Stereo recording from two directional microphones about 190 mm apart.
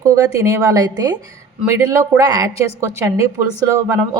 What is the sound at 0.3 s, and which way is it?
A woman's voice, 15° right (ahead or behind).